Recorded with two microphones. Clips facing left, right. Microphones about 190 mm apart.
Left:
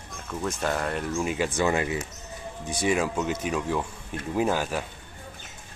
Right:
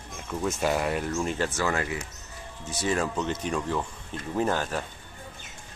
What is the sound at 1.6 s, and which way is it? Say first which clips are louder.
Speech: left 3 dB; 20° left (ahead or behind).